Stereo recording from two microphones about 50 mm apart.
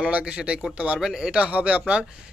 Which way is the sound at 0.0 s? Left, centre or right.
Right.